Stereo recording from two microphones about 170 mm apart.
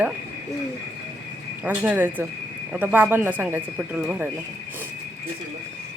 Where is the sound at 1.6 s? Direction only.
10° right (ahead or behind).